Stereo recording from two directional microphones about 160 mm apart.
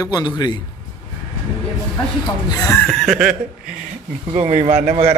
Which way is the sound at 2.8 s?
Centre (ahead or behind).